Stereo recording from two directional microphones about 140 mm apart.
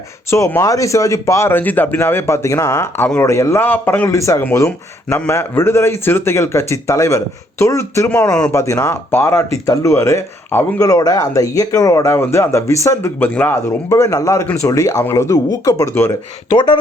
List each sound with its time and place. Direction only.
0.3 s speech: 20° left (ahead or behind)